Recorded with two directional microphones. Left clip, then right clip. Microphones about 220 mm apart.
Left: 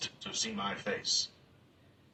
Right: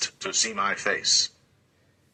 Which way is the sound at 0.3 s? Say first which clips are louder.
Right 11 dB; 45° right (ahead or behind).